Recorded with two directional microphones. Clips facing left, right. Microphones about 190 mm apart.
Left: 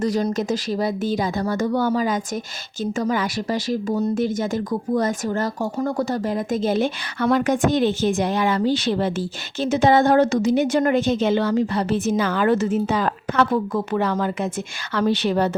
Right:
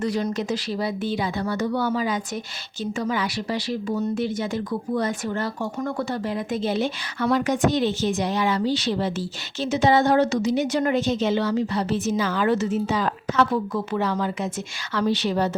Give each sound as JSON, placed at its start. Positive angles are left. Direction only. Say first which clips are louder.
{"t": 0.0, "sound": "a woman's voice", "louder": "left 3 dB", "side_deg": 40}